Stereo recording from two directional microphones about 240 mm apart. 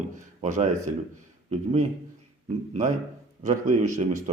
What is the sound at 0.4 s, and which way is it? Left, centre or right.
Speech, right.